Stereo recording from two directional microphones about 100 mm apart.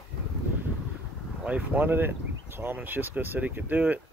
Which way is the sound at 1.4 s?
15° right (ahead or behind).